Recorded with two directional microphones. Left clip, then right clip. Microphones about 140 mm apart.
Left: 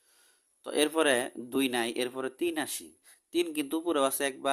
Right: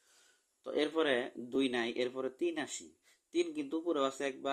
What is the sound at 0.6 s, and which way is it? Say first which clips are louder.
Speech: left 6 dB; 35° left (ahead or behind).